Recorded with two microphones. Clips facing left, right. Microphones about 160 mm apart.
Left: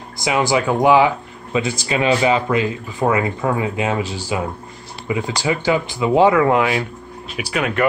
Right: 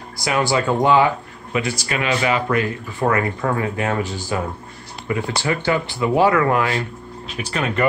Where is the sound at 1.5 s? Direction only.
25° left (ahead or behind).